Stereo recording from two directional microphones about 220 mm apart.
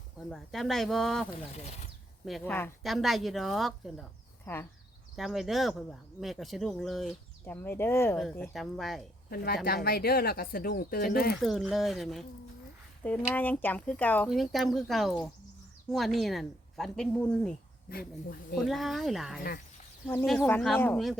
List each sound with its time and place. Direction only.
0.3 s speech: centre (ahead or behind)
5.1 s speech: centre (ahead or behind)
9.3 s speech: 45° left (ahead or behind)
11.3 s speech: centre (ahead or behind)
17.8 s speech: 45° left (ahead or behind)
18.5 s speech: centre (ahead or behind)